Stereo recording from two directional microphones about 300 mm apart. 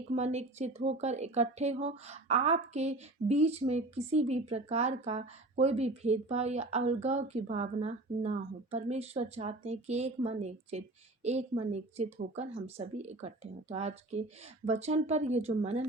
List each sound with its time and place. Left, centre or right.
0.2 s speech: right